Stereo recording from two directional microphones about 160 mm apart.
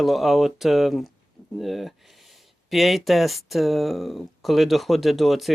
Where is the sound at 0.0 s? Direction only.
Centre (ahead or behind).